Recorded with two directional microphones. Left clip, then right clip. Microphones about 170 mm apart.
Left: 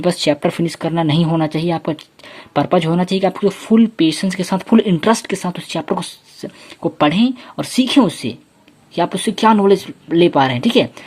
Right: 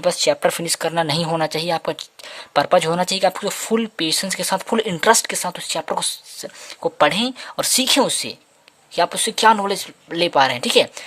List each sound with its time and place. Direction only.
0.0 s speech: 30° right (ahead or behind)